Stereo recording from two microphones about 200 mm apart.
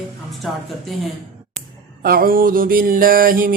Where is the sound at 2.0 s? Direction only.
45° right (ahead or behind).